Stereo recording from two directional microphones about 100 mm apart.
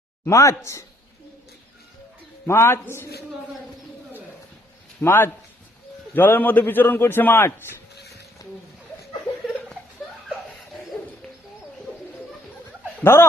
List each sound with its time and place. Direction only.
0.3 s speech: 30° left (ahead or behind)
2.5 s a man's voice: 25° left (ahead or behind)
4.9 s a man's voice: 20° left (ahead or behind)
13.0 s speech: 25° left (ahead or behind)